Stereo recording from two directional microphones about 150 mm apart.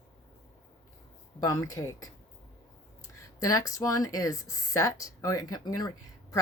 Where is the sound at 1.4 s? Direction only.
20° left (ahead or behind).